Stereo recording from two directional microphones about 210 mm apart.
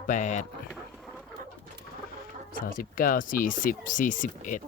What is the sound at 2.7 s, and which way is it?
Speech, 40° left (ahead or behind).